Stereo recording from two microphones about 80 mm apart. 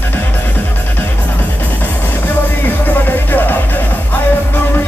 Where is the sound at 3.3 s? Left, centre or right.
Left.